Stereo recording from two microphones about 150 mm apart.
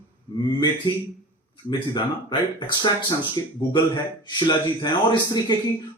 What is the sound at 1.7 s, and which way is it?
Speech, 30° left (ahead or behind).